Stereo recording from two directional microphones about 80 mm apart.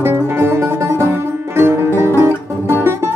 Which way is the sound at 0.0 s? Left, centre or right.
Right.